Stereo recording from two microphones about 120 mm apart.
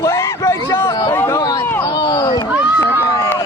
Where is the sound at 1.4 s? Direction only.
35° left (ahead or behind).